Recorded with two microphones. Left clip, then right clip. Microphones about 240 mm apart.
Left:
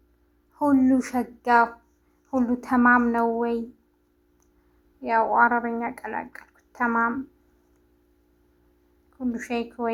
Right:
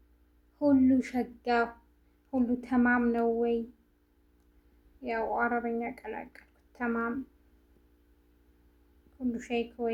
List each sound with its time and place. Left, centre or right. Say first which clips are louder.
0.6 s speech: left 4 dB; centre
4.9 s speech: left 11 dB; centre
9.1 s a woman's voice: left 4 dB; centre